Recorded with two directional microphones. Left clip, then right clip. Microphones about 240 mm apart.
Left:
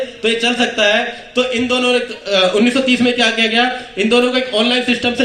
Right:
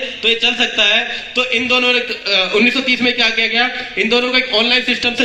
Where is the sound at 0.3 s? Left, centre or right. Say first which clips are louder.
Right 1 dB; left.